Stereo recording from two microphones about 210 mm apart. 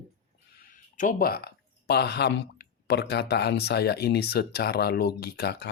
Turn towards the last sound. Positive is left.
turn(degrees=50)  # may be behind; listen again after turning